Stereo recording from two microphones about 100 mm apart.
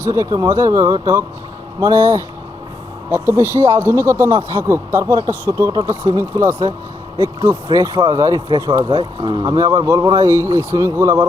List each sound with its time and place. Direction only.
0.1 s speech: 30° right (ahead or behind)
7.7 s speech: 30° right (ahead or behind)